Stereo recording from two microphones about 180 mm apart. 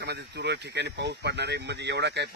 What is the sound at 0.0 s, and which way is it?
A man's voice, 65° right (ahead or behind).